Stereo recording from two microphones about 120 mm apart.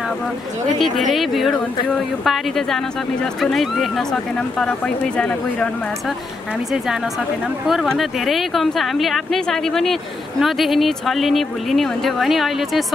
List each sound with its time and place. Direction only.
0.9 s speech: centre (ahead or behind)
7.6 s speech: centre (ahead or behind)